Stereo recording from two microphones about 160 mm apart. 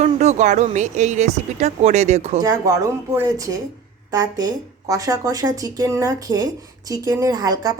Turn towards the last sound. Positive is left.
turn(degrees=-25)  # may be behind; listen again after turning